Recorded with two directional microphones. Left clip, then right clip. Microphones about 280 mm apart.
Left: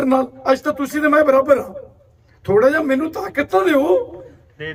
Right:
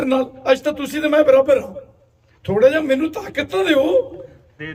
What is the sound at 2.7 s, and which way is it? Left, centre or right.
Speech, centre.